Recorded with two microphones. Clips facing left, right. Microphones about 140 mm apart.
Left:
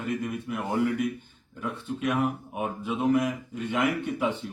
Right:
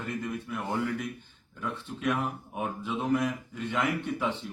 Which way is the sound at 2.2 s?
Centre (ahead or behind).